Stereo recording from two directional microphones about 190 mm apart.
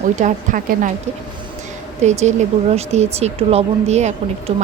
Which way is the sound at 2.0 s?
35° right (ahead or behind).